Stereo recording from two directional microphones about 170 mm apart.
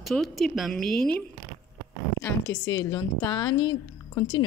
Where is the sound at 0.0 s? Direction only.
Centre (ahead or behind).